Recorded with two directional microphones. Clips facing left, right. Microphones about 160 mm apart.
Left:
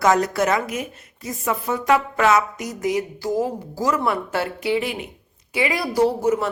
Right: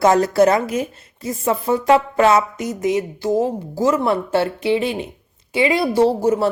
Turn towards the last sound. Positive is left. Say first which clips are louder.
# right 3 dB
turn(degrees=-30)  # may be behind; listen again after turning